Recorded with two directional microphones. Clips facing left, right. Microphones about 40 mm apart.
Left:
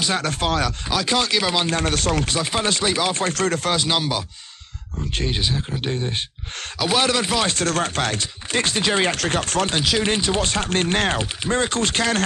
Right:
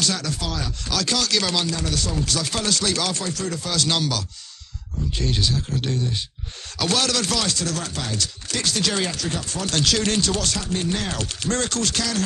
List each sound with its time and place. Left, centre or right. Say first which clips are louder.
0.1 s chopping: left 6 dB; left
0.8 s speech: right 1 dB; left
1.7 s chopping: left 5 dB; left
2.2 s speech: left 3 dB; left
3.2 s chopping: left 6 dB; left
3.7 s speech: left 2 dB; left
5.2 s speech: even; left
6.8 s speech: left 3 dB; left
7.5 s chopping: left 6 dB; left
8.2 s chopping: left 4 dB; left
9.1 s chopping: left 6 dB; left
9.7 s speech: left 1 dB; centre
10.6 s chopping: left 5 dB; left
11.1 s speech: left 3 dB; left